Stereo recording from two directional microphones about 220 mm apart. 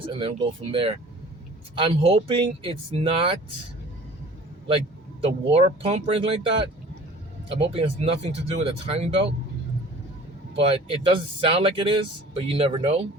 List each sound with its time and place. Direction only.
0.7 s speech: 25° right (ahead or behind)
5.2 s speech: 25° right (ahead or behind)
10.6 s speech: 25° right (ahead or behind)